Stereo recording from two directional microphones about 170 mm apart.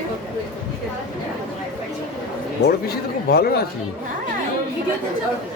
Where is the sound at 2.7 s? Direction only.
65° left (ahead or behind).